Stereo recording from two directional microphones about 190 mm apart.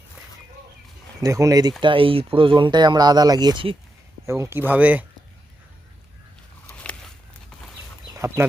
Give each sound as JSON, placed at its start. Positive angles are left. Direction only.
{"t": 1.2, "sound": "speech", "side_deg": -15}
{"t": 4.3, "sound": "speech", "side_deg": -15}
{"t": 6.7, "sound": "a sound", "side_deg": 5}
{"t": 8.1, "sound": "speech", "side_deg": -15}